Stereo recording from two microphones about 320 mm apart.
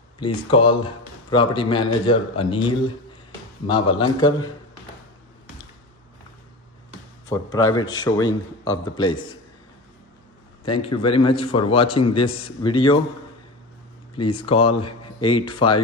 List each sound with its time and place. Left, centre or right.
0.2 s speech: centre
7.2 s speech: centre
11.0 s speech: centre
14.1 s speech: centre